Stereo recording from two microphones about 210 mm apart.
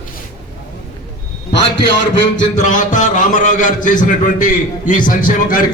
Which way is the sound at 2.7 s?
35° left (ahead or behind).